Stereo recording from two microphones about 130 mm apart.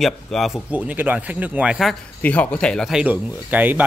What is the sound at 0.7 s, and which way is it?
Speech, 10° right (ahead or behind).